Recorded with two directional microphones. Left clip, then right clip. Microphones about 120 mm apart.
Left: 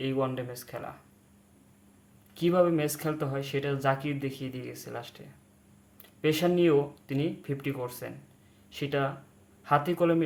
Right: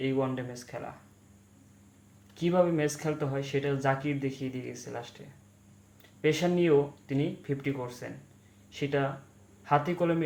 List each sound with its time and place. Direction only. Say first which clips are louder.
0.0 s speech: even; 40° left (ahead or behind)
2.3 s speech: left 2 dB; 35° left (ahead or behind)
6.2 s speech: left 1 dB; 35° left (ahead or behind)